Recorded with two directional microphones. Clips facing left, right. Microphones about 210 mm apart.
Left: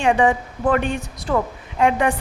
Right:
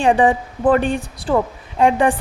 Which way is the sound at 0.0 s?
35° right (ahead or behind).